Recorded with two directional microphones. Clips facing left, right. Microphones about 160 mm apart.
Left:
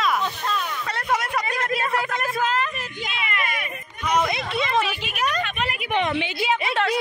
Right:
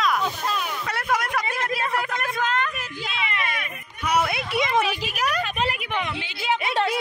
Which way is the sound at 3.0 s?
30° right (ahead or behind).